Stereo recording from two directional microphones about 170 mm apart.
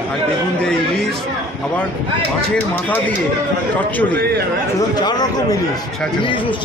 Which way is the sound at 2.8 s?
10° left (ahead or behind).